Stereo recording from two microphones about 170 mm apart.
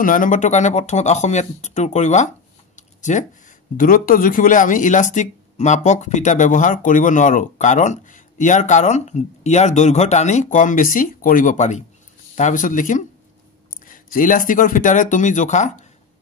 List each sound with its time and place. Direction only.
0.0 s speech: 50° left (ahead or behind)